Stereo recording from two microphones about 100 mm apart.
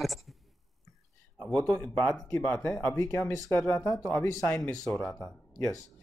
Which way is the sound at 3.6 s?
10° left (ahead or behind).